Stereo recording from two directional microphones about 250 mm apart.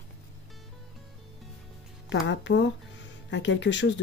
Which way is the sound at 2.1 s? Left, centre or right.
Left.